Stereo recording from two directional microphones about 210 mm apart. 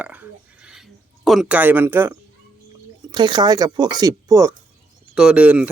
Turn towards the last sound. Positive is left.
turn(degrees=-5)  # may be behind; listen again after turning